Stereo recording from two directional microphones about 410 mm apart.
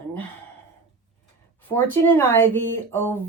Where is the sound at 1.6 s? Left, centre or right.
Centre.